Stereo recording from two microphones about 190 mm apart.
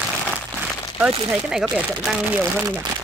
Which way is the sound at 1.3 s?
5° right (ahead or behind).